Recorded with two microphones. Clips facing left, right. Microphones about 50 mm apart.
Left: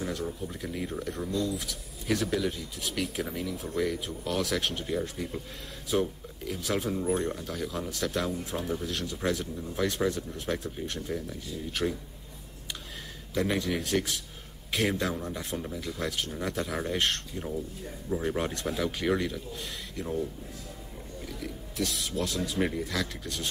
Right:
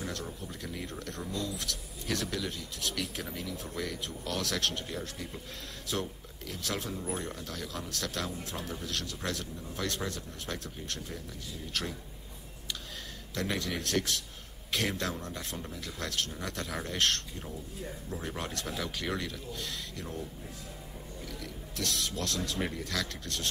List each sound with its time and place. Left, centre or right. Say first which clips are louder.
0.0 s speech: left 5 dB; centre
13.3 s speech: left 5 dB; centre
21.3 s speech: left 4 dB; centre